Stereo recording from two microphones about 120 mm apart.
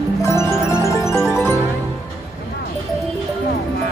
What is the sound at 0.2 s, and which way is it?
Music, 25° left (ahead or behind).